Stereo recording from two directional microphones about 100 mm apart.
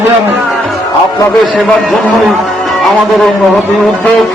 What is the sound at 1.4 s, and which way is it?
Speech, centre (ahead or behind).